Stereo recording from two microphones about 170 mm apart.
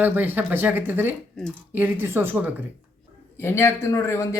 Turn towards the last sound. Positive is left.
turn(degrees=15)  # may be behind; listen again after turning